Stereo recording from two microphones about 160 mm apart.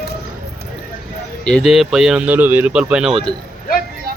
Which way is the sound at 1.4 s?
Centre (ahead or behind).